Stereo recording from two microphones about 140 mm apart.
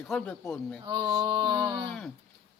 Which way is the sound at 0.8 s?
35° right (ahead or behind).